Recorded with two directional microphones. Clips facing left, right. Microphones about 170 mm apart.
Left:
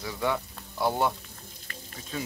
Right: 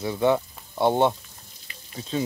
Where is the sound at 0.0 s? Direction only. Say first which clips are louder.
Right 8 dB; 25° right (ahead or behind).